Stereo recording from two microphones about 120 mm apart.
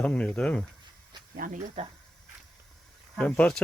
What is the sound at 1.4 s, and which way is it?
Speech, 90° right.